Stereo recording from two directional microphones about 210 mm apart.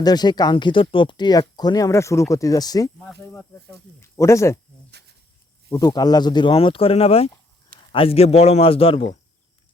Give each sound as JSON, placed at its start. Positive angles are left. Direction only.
{"t": 0.0, "sound": "speech", "side_deg": 20}
{"t": 4.0, "sound": "speech", "side_deg": 15}
{"t": 5.7, "sound": "speech", "side_deg": 20}